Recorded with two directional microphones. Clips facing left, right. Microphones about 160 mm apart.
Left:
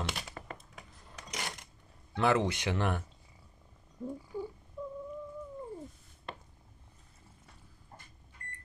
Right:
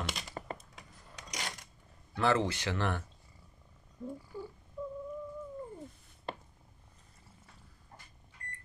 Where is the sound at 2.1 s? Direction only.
15° left (ahead or behind).